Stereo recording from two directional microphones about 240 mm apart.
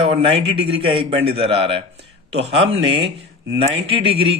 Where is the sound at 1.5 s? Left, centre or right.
Right.